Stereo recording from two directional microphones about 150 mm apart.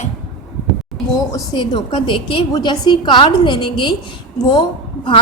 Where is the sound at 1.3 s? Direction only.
30° left (ahead or behind).